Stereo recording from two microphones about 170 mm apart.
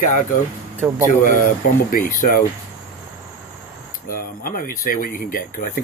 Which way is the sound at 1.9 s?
55° left (ahead or behind).